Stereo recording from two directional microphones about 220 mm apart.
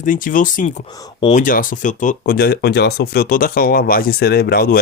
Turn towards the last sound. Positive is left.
turn(degrees=45)  # may be behind; listen again after turning